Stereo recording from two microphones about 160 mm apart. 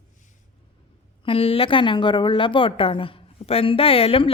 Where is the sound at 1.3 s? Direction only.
35° left (ahead or behind).